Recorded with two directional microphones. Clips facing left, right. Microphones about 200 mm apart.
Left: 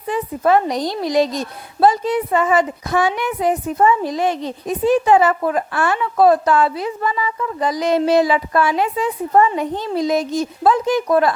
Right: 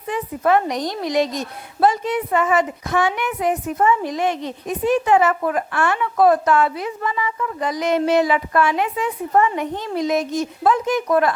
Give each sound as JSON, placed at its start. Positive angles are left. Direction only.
{"t": 0.1, "sound": "a woman's voice", "side_deg": 30}